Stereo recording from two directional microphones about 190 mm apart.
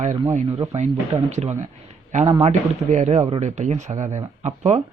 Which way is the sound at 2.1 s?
40° right (ahead or behind).